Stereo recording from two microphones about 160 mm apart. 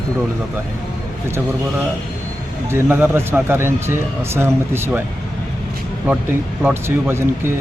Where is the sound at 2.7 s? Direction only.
15° right (ahead or behind).